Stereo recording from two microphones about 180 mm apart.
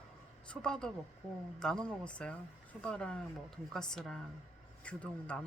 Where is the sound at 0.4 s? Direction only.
5° left (ahead or behind).